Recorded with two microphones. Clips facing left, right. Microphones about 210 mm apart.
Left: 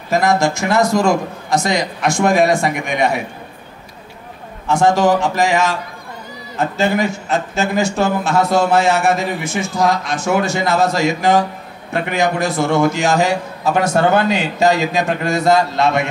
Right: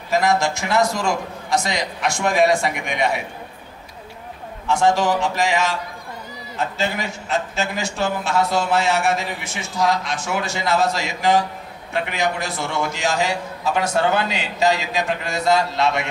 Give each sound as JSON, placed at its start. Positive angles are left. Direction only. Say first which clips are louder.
{"t": 0.1, "sound": "a man's voice", "louder": "left 4 dB", "side_deg": 45}
{"t": 4.6, "sound": "a man's voice", "louder": "left 4 dB", "side_deg": 45}